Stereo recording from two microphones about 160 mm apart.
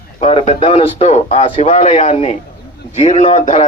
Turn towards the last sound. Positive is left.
turn(degrees=40)  # may be behind; listen again after turning